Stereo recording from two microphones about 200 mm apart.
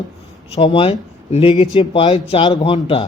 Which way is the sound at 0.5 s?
25° left (ahead or behind).